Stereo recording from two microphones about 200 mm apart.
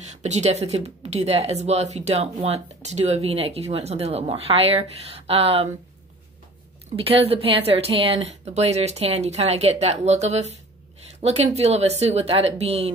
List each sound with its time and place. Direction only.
0.1 s speech: 35° right (ahead or behind)
7.0 s a woman's voice: 30° right (ahead or behind)